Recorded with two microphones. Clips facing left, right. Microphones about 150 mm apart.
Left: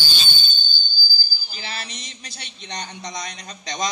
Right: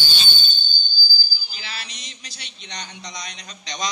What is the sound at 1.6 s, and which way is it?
Speech, 50° left (ahead or behind).